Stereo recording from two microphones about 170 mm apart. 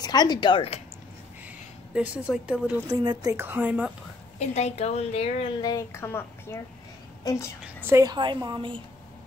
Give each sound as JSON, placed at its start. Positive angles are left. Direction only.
{"t": 0.0, "sound": "speech", "side_deg": 25}
{"t": 2.0, "sound": "speech", "side_deg": -5}
{"t": 2.9, "sound": "speech", "side_deg": -25}
{"t": 4.4, "sound": "a woman's voice", "side_deg": 40}
{"t": 5.6, "sound": "speech", "side_deg": 20}
{"t": 7.6, "sound": "a woman's voice", "side_deg": -15}